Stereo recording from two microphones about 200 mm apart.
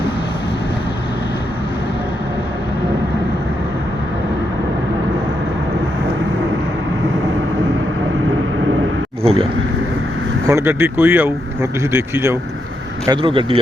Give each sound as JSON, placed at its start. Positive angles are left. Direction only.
{"t": 9.2, "sound": "a sound", "side_deg": -30}
{"t": 10.5, "sound": "speech", "side_deg": -10}
{"t": 13.1, "sound": "speech", "side_deg": -25}